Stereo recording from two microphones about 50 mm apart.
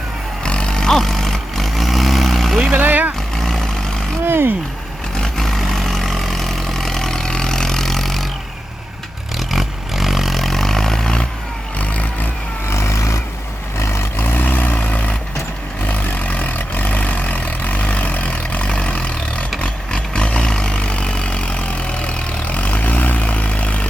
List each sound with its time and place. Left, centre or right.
0.4 s vehicle: centre
2.7 s vehicle: right
3.3 s vehicle: centre
4.3 s a sound: right
5.2 s vehicle: centre
9.4 s a sound: centre
11.8 s vehicle: left
12.7 s vehicle: left
14.3 s vehicle: left